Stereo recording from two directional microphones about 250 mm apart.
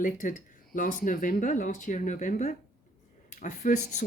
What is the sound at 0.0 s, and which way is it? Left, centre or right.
Speech, left.